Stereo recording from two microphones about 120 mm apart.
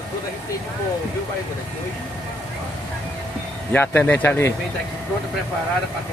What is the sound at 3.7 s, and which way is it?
Speech, 15° left (ahead or behind).